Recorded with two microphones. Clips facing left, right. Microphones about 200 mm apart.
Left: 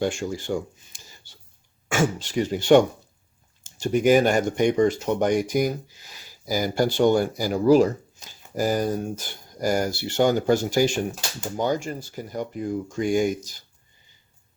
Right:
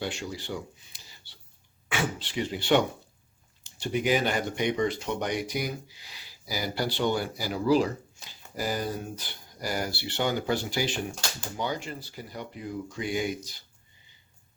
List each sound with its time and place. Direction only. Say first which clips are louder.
0.0 s speech: left 8 dB; 45° left (ahead or behind)